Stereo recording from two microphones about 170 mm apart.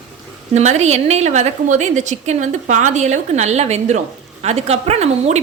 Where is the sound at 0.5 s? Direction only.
40° right (ahead or behind).